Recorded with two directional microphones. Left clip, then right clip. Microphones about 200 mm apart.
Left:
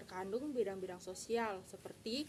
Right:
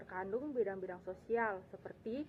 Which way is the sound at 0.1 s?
35° left (ahead or behind).